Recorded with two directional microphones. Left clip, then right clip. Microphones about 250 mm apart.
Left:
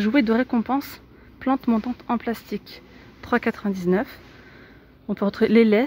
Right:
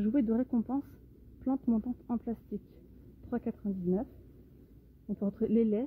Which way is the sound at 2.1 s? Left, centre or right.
Centre.